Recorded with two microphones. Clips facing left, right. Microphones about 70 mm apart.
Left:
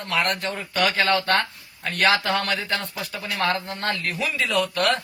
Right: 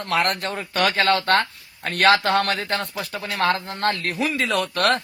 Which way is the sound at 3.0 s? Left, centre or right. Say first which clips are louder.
Right 2 dB; right.